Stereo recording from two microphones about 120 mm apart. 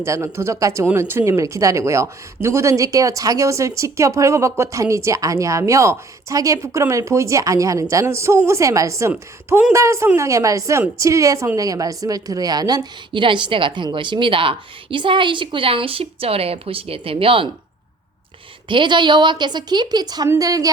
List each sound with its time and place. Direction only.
0.0 s a woman's voice: 25° right (ahead or behind); by 17.5 s 50° right (ahead or behind)
18.7 s a woman's voice: 40° right (ahead or behind)